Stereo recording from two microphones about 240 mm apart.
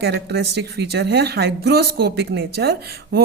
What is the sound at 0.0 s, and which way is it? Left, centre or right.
Speech, right.